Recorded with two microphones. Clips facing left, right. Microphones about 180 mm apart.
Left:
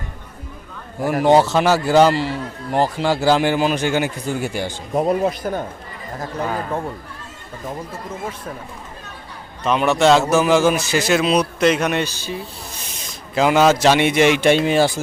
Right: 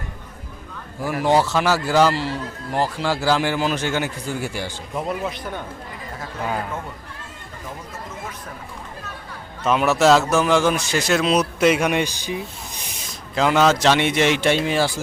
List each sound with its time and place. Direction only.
1.0 s a man's voice: 20° left (ahead or behind)
4.9 s speech: 40° left (ahead or behind)
9.6 s a man's voice: 5° right (ahead or behind)
13.3 s a man's voice: 10° left (ahead or behind)